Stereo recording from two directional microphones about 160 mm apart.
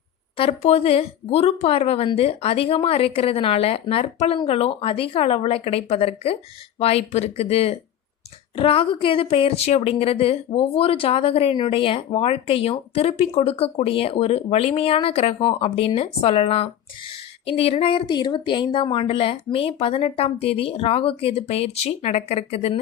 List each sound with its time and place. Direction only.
0.3 s a woman's voice: 40° left (ahead or behind)